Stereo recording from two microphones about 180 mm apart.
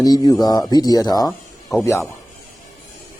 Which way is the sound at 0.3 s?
20° left (ahead or behind).